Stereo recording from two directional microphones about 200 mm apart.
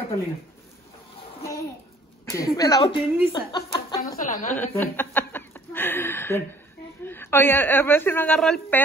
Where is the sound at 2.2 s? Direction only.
15° left (ahead or behind).